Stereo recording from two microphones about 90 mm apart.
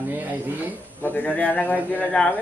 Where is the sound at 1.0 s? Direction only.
20° left (ahead or behind).